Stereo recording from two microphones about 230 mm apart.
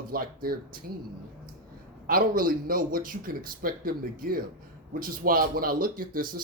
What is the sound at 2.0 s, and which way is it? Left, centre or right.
Speech, right.